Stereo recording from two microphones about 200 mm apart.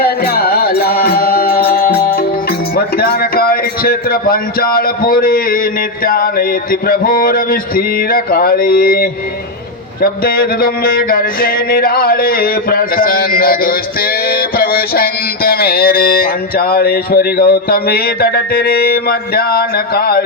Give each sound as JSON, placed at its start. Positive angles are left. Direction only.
{"t": 0.0, "sound": "music", "side_deg": 50}
{"t": 2.7, "sound": "speech", "side_deg": 50}